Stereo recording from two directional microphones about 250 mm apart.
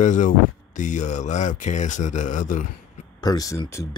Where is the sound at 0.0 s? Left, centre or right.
Left.